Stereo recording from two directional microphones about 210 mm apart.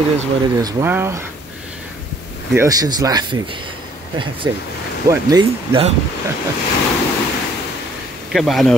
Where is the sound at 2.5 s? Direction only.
15° right (ahead or behind).